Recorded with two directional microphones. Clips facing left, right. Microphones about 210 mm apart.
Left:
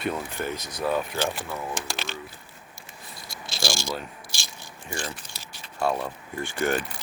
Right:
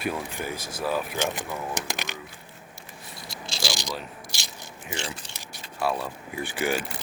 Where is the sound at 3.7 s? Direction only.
20° right (ahead or behind).